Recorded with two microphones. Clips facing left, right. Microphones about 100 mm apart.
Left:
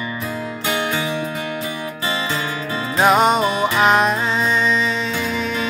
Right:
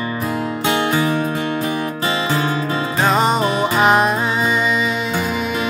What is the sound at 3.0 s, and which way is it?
Music, 5° left (ahead or behind).